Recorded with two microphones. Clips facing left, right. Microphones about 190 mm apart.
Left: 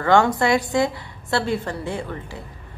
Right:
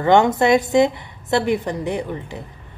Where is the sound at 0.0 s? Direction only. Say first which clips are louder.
Right 3 dB; 20° right (ahead or behind).